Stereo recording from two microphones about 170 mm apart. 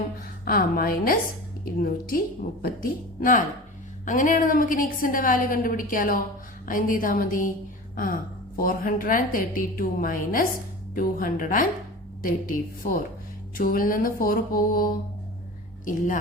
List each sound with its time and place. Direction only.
0.4 s a woman's voice: 60° left (ahead or behind)